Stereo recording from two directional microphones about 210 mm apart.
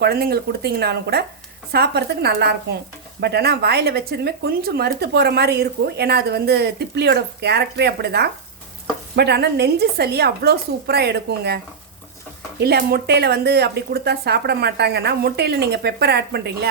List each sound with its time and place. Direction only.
0.0 s speech: 50° right (ahead or behind)